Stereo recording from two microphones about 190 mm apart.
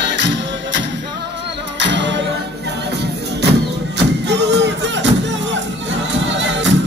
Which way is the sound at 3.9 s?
65° right (ahead or behind).